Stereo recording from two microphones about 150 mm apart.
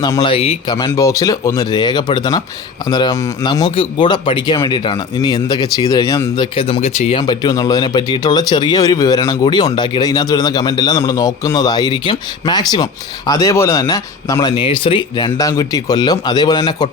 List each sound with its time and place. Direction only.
0.0 s speech: 30° left (ahead or behind)
0.9 s speech: 20° left (ahead or behind)
6.3 s speech: 35° left (ahead or behind)
7.2 s speech: 25° left (ahead or behind)
14.5 s speech: 35° left (ahead or behind)